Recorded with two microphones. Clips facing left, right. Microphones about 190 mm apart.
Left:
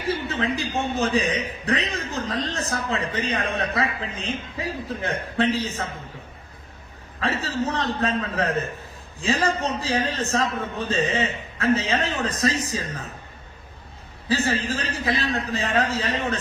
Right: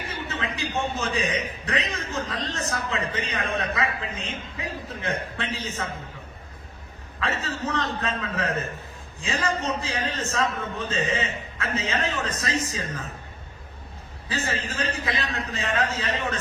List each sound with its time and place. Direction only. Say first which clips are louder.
0.0 s a man's voice: left 7 dB; 35° left (ahead or behind)
7.2 s a man's voice: left 4 dB; 35° left (ahead or behind)
14.3 s a man's voice: left 6 dB; 35° left (ahead or behind)